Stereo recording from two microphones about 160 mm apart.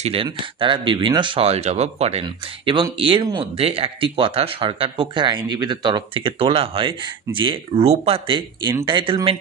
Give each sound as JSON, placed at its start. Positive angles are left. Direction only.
{"t": 0.0, "sound": "speech", "side_deg": -35}